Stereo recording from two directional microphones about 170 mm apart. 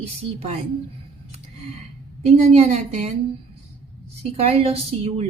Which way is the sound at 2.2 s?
40° right (ahead or behind).